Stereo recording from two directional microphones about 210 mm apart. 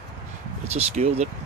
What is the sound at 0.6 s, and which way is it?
Speech, 30° right (ahead or behind).